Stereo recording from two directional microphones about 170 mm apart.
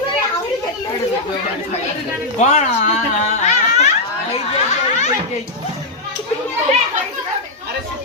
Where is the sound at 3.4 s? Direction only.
40° left (ahead or behind).